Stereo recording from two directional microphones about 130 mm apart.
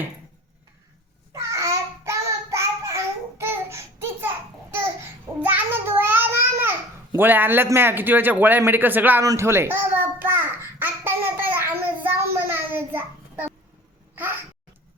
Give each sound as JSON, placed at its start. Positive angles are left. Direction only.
{"t": 1.3, "sound": "child singing", "side_deg": -25}
{"t": 5.4, "sound": "babbling", "side_deg": -15}